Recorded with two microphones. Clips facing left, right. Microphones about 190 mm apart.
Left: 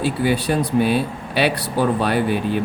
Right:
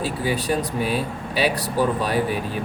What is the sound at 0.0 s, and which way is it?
Speech, 65° left (ahead or behind).